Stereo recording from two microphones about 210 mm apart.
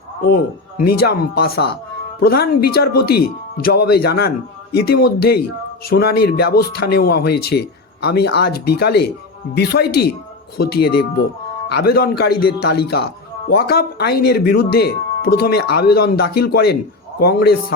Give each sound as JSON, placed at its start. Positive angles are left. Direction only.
{"t": 0.8, "sound": "speech", "side_deg": 45}